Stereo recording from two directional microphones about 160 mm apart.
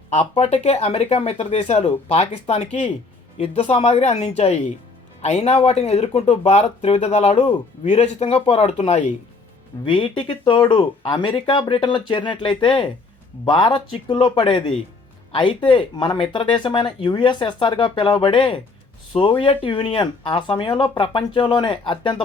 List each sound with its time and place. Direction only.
0.1 s speech: 45° left (ahead or behind)
9.8 s speech: 30° left (ahead or behind)